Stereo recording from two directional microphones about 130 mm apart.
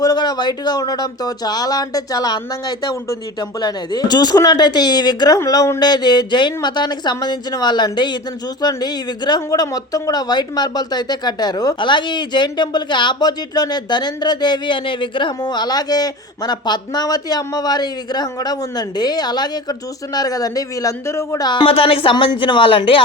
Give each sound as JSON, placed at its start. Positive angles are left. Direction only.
{"t": 0.0, "sound": "speech", "side_deg": 30}